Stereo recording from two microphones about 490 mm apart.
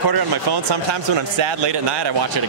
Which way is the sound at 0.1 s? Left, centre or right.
Right.